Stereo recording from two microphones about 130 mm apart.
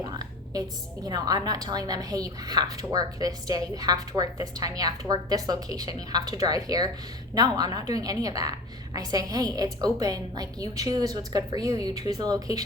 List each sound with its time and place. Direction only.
0.0 s whispering: 30° right (ahead or behind)
1.0 s a woman's voice: 30° right (ahead or behind)